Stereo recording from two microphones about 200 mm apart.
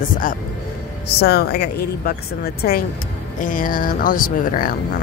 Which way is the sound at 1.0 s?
55° left (ahead or behind).